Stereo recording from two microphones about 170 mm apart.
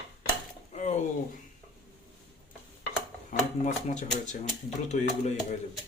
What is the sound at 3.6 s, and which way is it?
Speech, 45° left (ahead or behind).